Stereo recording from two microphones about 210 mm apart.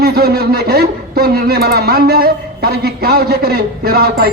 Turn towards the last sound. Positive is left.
turn(degrees=-45)  # may be behind; listen again after turning